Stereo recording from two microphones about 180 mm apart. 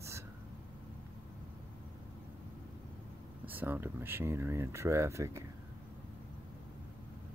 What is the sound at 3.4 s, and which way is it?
Speech, 10° right (ahead or behind).